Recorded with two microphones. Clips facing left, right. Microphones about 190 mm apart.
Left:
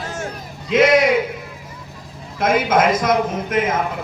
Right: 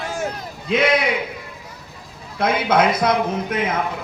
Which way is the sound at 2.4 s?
45° left (ahead or behind).